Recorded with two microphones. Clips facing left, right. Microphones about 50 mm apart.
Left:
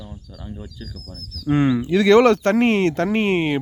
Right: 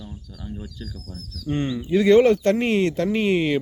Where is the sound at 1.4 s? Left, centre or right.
Left.